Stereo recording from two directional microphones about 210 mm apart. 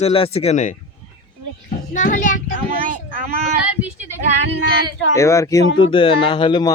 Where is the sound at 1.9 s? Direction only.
35° left (ahead or behind).